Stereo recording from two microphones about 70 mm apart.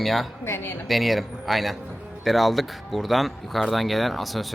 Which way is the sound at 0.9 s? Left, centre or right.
Centre.